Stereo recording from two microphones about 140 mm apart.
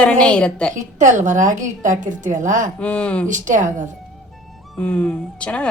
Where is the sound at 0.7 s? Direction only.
60° right (ahead or behind).